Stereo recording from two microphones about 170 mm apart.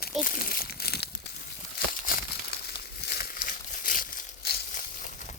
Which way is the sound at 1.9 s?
55° left (ahead or behind).